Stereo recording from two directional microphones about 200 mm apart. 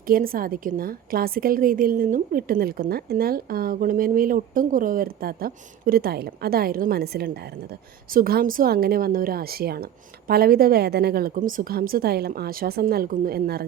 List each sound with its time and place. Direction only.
0.1 s a woman's voice: 45° right (ahead or behind)